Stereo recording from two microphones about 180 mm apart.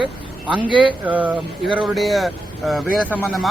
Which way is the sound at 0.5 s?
25° right (ahead or behind).